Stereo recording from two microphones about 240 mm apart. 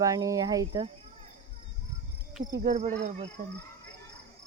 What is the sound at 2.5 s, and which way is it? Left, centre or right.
Speech, right.